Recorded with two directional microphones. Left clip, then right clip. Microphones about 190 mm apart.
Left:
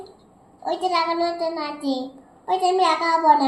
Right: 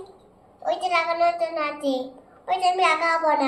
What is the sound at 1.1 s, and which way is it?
Child singing, 20° right (ahead or behind).